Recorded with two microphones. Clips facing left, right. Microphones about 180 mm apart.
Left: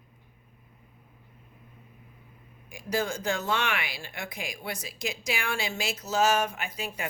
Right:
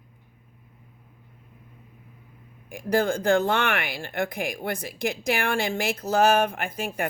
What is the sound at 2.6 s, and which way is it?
Speech, 55° right (ahead or behind).